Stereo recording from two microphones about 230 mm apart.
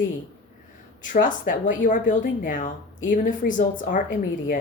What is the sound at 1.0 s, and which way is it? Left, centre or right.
Speech, left.